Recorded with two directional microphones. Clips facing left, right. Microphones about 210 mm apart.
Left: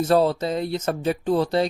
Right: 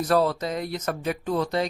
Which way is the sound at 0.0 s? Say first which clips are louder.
Left 3 dB; 25° left (ahead or behind).